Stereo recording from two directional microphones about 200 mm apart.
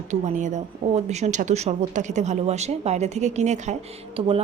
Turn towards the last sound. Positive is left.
turn(degrees=-30)  # may be behind; listen again after turning